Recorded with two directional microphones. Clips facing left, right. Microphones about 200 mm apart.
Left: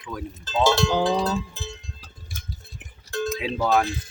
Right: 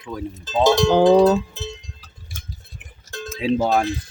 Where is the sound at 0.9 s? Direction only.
55° right (ahead or behind).